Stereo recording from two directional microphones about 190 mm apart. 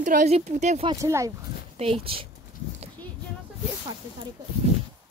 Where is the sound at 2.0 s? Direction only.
30° right (ahead or behind).